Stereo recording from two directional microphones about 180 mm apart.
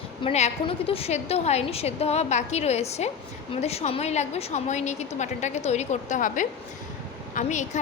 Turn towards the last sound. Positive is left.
turn(degrees=40)  # may be behind; listen again after turning